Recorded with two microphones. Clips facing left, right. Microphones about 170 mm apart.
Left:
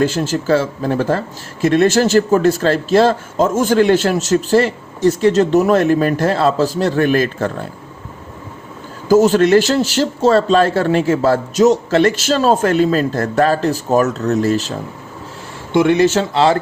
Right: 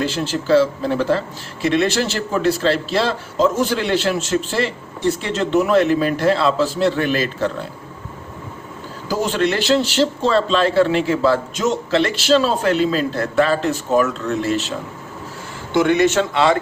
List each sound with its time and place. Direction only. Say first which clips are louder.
0.0 s speech: left 5 dB; 45° left (ahead or behind)
9.0 s speech: left 9 dB; 45° left (ahead or behind)
15.7 s speech: left 3 dB; 25° left (ahead or behind)